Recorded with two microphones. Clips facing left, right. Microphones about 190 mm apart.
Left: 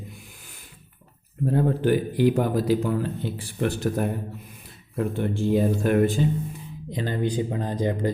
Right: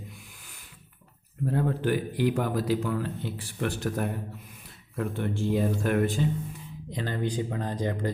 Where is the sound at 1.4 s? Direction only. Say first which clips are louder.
Left 5 dB; 30° left (ahead or behind).